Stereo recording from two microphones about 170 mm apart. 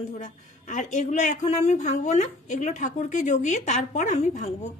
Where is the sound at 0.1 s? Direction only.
45° left (ahead or behind).